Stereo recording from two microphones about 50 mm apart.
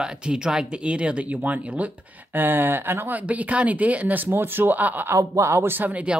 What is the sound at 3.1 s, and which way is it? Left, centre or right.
Speech, right.